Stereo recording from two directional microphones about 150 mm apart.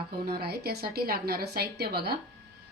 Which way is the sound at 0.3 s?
90° right.